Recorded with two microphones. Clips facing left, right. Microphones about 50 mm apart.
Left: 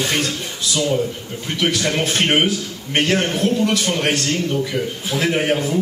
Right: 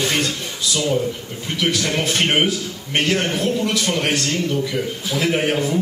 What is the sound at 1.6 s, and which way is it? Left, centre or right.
A man's voice, centre.